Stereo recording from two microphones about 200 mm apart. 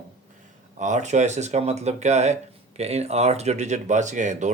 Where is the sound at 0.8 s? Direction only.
35° right (ahead or behind).